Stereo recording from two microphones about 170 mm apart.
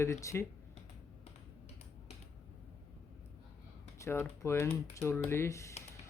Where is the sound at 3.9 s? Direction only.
15° left (ahead or behind).